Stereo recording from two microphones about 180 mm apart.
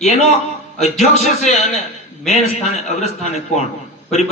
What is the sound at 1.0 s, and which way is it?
A man's voice, 35° left (ahead or behind).